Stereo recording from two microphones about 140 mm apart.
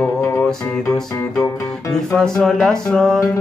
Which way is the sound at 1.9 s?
5° left (ahead or behind).